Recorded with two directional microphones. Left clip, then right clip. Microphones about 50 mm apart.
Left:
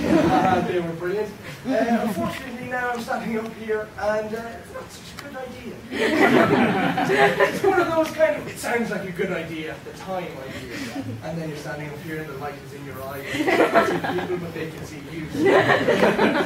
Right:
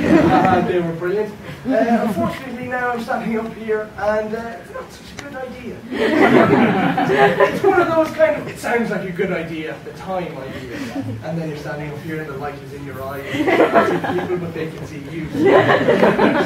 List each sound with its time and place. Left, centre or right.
0.0 s a man's voice: centre
5.9 s speech: centre
12.1 s speech: centre